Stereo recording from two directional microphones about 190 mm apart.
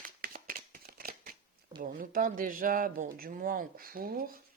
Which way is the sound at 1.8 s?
45° right (ahead or behind).